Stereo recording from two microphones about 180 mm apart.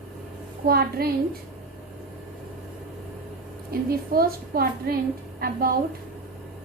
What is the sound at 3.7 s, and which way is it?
A woman's voice, 55° right (ahead or behind).